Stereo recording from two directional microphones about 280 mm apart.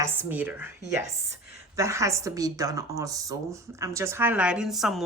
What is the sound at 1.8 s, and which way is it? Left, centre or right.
A woman's voice, centre.